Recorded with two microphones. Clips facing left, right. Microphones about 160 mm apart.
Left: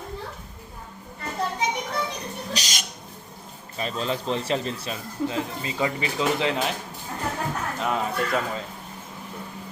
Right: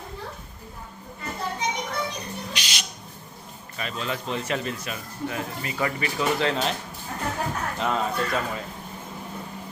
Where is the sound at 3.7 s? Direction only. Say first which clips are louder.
Left 3 dB; 30° left (ahead or behind); by 6.7 s 15° left (ahead or behind).